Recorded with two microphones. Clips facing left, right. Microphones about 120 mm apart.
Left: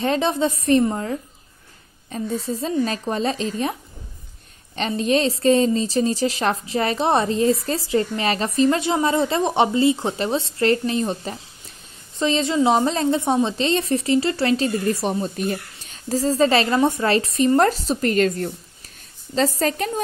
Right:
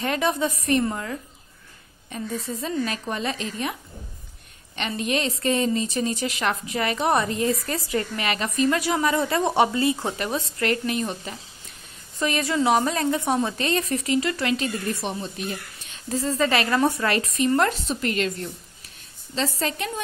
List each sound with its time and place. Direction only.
0.0 s a woman's voice: 30° left (ahead or behind)
4.7 s a woman's voice: 35° left (ahead or behind)